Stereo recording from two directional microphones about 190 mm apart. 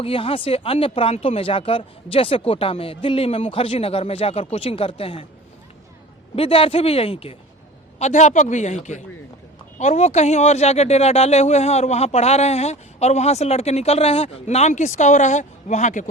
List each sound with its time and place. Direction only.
0.0 s speech: 30° left (ahead or behind)
6.3 s speech: 30° left (ahead or behind)